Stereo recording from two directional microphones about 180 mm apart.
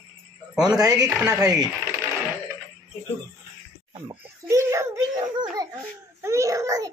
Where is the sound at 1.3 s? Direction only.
20° right (ahead or behind).